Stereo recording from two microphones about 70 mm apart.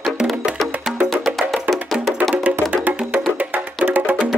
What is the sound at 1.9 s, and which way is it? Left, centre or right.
Music, centre.